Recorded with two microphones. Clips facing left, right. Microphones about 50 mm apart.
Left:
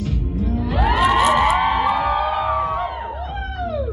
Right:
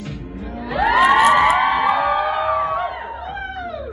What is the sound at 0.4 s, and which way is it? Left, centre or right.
Music, centre.